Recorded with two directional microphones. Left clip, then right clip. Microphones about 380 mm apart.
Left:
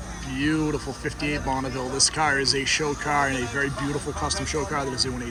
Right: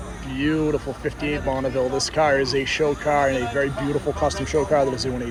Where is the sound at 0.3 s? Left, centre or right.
Centre.